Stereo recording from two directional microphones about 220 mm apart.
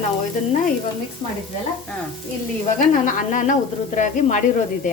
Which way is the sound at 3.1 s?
35° left (ahead or behind).